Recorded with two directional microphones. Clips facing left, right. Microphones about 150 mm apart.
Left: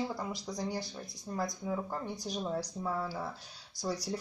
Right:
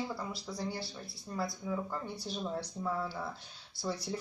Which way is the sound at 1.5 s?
45° left (ahead or behind).